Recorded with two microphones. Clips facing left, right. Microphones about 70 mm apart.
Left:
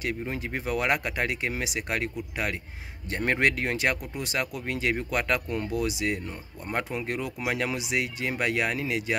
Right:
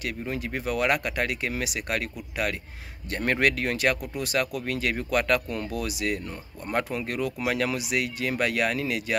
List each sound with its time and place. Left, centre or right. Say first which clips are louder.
0.3 s speech: right 1 dB; left